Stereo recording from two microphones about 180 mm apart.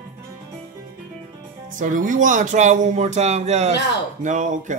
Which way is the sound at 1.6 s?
45° right (ahead or behind).